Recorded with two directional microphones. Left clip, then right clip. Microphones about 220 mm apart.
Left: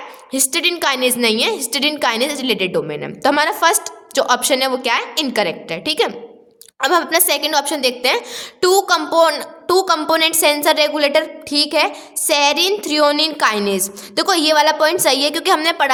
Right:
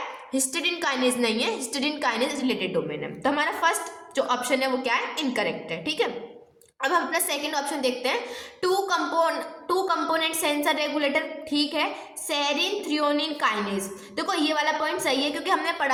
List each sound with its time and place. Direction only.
0.3 s a woman's voice: 45° left (ahead or behind)